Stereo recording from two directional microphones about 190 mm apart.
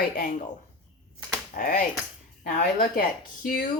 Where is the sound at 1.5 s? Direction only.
45° left (ahead or behind).